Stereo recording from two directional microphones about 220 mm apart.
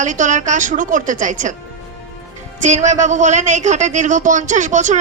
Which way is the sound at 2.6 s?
35° right (ahead or behind).